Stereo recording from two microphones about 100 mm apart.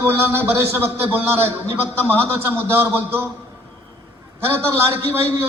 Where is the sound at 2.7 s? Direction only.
25° right (ahead or behind).